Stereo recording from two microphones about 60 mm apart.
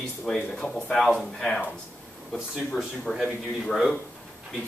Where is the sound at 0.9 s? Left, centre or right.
Centre.